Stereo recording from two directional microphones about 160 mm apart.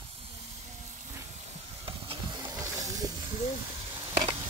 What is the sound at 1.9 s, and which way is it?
Hiss, 35° right (ahead or behind).